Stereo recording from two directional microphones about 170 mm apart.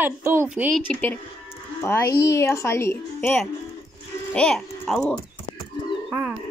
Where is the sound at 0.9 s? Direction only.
10° left (ahead or behind).